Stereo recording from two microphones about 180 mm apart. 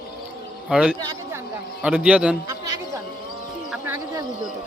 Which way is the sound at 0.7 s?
5° right (ahead or behind).